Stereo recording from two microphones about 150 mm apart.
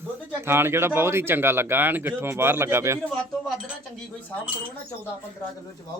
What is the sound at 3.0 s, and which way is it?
Speech, 5° left (ahead or behind).